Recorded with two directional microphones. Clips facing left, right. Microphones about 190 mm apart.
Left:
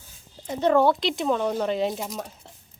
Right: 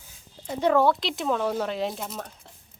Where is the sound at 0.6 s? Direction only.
Centre (ahead or behind).